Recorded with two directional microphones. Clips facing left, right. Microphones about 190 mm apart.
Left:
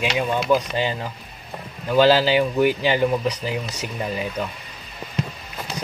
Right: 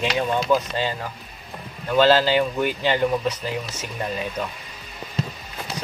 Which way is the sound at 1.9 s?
15° left (ahead or behind).